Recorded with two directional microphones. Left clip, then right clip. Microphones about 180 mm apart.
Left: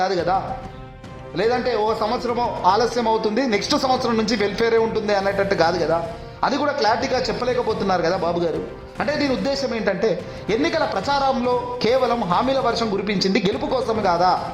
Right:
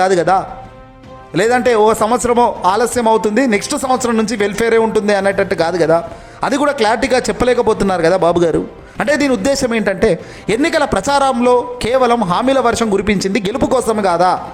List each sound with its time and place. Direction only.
0.0 s a man's voice: 40° right (ahead or behind)
1.4 s a man's voice: 40° right (ahead or behind)